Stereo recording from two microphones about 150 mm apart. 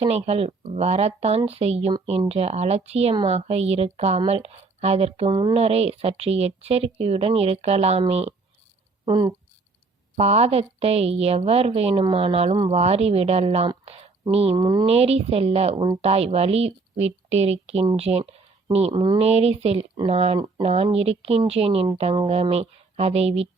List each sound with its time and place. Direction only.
0.0 s speech: 45° right (ahead or behind)
5.3 s a woman's voice: 30° right (ahead or behind)
5.5 s speech: 45° right (ahead or behind)
9.0 s speech: 30° right (ahead or behind)
10.2 s a woman's voice: 45° right (ahead or behind); by 14.8 s 30° right (ahead or behind)
14.8 s a woman's voice: 45° right (ahead or behind)
19.2 s speech: 45° right (ahead or behind)